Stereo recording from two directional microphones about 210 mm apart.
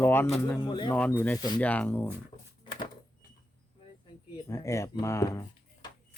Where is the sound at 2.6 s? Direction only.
20° left (ahead or behind).